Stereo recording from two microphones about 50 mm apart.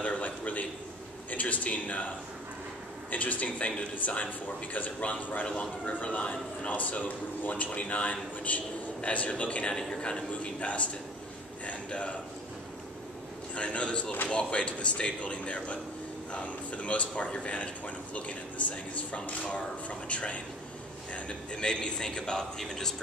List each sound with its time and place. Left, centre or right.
0.0 s a sound: left
1.3 s a man's voice: left
3.1 s a man's voice: left
13.6 s a man's voice: left